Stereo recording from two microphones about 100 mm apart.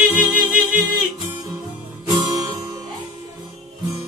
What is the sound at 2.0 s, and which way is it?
Music, 40° right (ahead or behind).